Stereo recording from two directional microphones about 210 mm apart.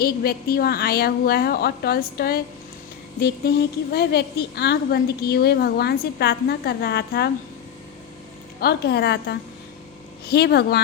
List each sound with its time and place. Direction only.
0.0 s a woman's voice: 45° left (ahead or behind)
8.6 s a woman's voice: 50° left (ahead or behind)